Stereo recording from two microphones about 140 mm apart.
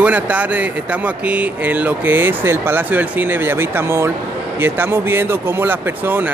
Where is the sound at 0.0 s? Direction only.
10° right (ahead or behind).